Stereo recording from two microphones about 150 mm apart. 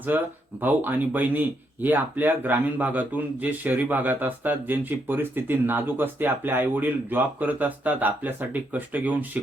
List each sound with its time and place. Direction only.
0.1 s speech: 10° right (ahead or behind)